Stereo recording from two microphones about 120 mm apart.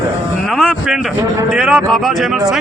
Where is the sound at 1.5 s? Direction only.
Centre (ahead or behind).